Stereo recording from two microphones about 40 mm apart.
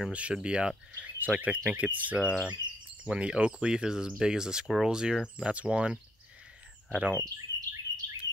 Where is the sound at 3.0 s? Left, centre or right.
Right.